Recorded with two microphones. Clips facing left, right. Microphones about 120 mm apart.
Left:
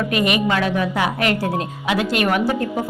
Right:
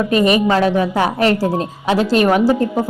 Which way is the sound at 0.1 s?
35° right (ahead or behind).